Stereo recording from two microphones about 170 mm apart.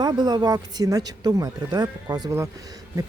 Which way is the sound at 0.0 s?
25° right (ahead or behind).